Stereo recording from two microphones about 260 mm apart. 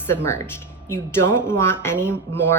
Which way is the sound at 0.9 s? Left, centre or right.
Centre.